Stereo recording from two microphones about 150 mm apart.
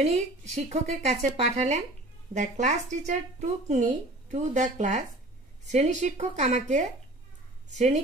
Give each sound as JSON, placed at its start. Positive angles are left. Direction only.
{"t": 0.0, "sound": "speech", "side_deg": -50}